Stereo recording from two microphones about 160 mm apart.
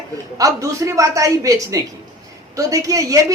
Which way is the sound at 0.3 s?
20° right (ahead or behind).